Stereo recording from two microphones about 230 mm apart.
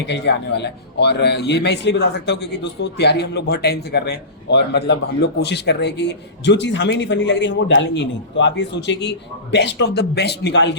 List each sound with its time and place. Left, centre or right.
0.0 s a man's voice: left